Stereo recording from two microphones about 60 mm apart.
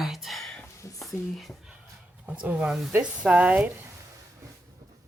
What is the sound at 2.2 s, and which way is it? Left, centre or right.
Speech, right.